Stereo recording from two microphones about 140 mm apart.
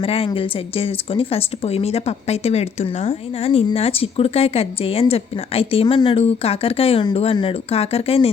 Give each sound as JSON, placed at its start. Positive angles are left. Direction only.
{"t": 0.0, "sound": "speech", "side_deg": 40}